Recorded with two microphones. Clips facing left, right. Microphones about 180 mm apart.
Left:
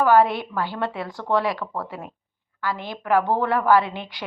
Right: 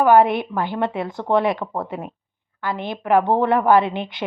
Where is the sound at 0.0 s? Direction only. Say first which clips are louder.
Right 3 dB; 20° right (ahead or behind).